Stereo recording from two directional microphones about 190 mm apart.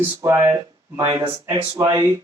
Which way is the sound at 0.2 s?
15° right (ahead or behind).